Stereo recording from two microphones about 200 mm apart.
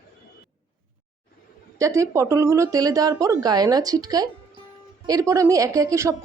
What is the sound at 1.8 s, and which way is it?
Speech, 15° right (ahead or behind).